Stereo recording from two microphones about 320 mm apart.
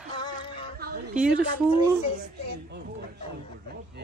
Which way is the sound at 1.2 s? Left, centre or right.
Centre.